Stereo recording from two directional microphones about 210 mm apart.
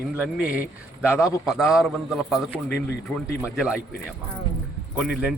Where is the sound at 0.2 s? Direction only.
5° right (ahead or behind).